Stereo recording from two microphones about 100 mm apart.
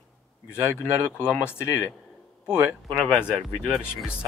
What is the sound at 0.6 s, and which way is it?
Speech, 25° left (ahead or behind).